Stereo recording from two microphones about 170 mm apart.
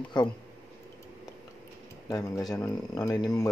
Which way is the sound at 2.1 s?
20° left (ahead or behind).